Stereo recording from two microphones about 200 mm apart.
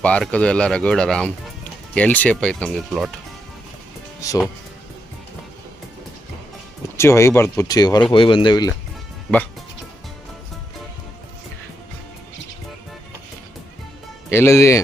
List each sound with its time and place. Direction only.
0.0 s speech: 5° left (ahead or behind)
6.9 s speech: 15° left (ahead or behind)
14.3 s speech: 15° left (ahead or behind)